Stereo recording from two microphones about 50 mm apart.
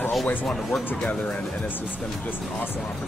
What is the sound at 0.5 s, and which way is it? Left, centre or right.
Speech, centre.